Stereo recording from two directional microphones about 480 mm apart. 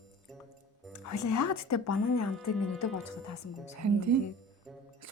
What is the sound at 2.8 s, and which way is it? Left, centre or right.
Speech, left.